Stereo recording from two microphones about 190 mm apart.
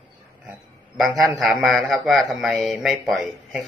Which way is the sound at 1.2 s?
Centre (ahead or behind).